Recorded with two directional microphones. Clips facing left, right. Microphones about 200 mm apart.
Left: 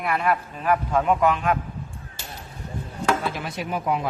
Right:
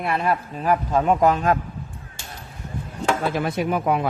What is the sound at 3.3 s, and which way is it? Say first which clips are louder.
Speech: right 7 dB; 55° right (ahead or behind).